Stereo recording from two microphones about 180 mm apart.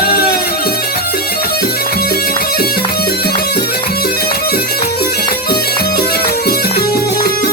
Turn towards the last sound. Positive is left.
turn(degrees=60)  # may be behind; listen again after turning